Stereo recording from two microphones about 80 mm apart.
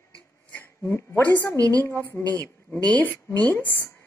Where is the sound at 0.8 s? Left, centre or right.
Left.